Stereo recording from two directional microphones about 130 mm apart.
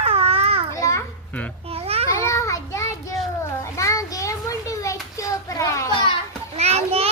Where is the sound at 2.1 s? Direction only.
25° left (ahead or behind).